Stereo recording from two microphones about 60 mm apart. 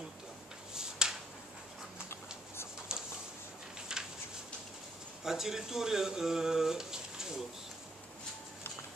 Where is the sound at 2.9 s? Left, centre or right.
Centre.